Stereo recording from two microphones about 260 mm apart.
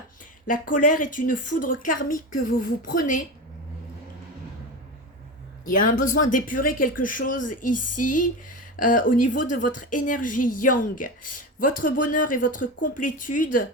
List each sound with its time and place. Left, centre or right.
0.4 s speech: left
5.6 s speech: left